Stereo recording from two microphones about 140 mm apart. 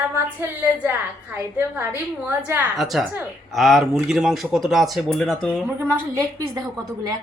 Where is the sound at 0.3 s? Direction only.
15° right (ahead or behind).